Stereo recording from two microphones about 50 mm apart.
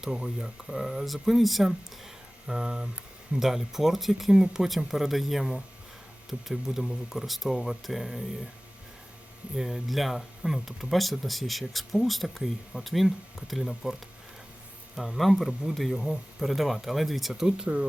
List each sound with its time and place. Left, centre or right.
0.0 s speech: centre
2.5 s speech: centre
6.5 s speech: centre
9.6 s speech: centre
14.9 s speech: centre
17.7 s speech: right